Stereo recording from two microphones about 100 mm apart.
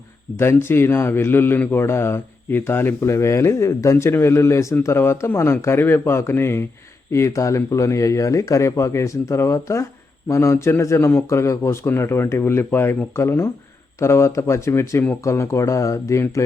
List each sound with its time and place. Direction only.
0.3 s speech: 25° left (ahead or behind)